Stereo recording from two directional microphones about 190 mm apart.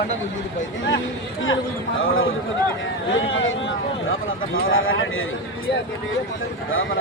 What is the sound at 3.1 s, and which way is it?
Speech, 85° left.